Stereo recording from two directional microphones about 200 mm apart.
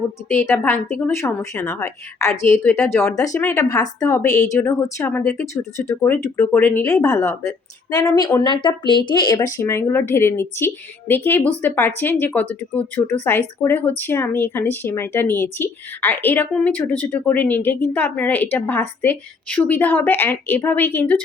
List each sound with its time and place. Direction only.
0.3 s speech: 10° left (ahead or behind)